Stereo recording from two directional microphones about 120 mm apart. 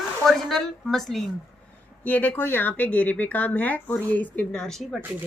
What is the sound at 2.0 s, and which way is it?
Speech, 15° left (ahead or behind).